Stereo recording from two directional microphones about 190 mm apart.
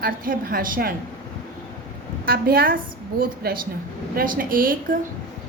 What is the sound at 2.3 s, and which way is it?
A woman's voice, 50° right (ahead or behind).